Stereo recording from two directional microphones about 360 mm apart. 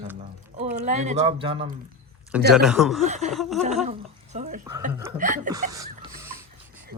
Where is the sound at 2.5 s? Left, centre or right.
Centre.